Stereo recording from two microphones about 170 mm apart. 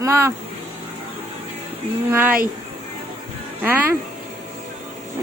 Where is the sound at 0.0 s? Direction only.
15° right (ahead or behind).